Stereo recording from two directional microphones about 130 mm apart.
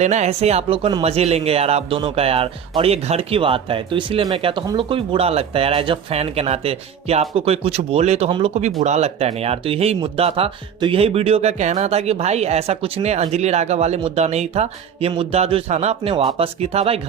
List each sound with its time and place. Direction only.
0.0 s speech: 60° right (ahead or behind)